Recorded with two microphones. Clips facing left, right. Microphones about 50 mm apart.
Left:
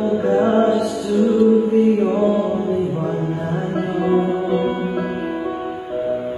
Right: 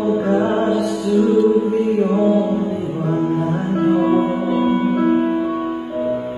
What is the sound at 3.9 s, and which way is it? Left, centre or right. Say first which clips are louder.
Music: left 1 dB; centre.